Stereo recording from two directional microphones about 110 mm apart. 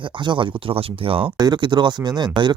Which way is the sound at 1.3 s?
40° right (ahead or behind).